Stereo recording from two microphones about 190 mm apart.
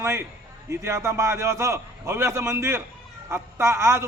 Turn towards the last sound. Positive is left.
turn(degrees=-15)  # may be behind; listen again after turning